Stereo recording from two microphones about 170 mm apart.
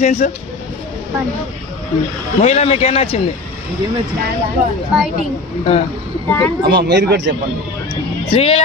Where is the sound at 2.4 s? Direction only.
40° left (ahead or behind).